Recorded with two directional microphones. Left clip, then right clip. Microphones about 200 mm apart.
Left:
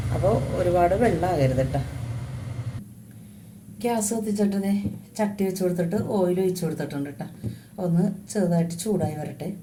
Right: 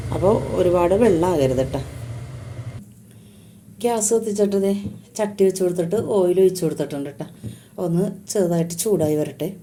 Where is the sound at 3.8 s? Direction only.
40° right (ahead or behind).